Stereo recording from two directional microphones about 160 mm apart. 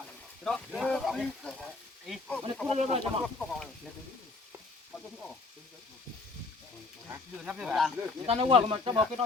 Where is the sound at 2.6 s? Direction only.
40° right (ahead or behind).